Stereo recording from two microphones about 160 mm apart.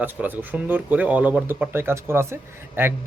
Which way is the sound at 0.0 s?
10° right (ahead or behind).